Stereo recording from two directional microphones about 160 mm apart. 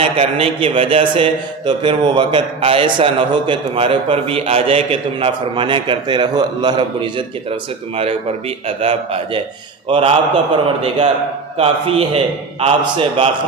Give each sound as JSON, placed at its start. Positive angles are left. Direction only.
{"t": 0.0, "sound": "a man's voice", "side_deg": -35}
{"t": 11.5, "sound": "a man's voice", "side_deg": -35}